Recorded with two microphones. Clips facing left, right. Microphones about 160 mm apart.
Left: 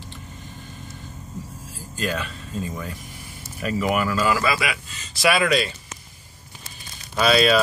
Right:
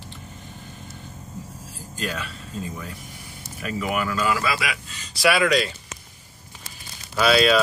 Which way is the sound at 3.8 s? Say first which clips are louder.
Left 3 dB; 30° left (ahead or behind).